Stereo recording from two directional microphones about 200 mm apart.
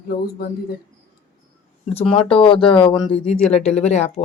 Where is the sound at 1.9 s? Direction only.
25° left (ahead or behind).